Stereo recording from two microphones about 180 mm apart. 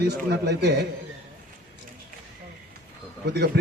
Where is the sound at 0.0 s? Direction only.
65° right (ahead or behind).